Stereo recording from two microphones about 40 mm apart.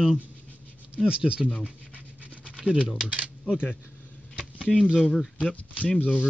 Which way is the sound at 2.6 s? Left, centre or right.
Right.